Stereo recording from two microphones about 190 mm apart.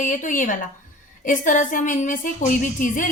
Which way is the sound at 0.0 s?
45° left (ahead or behind).